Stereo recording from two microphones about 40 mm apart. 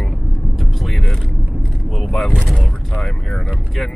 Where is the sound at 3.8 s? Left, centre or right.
Centre.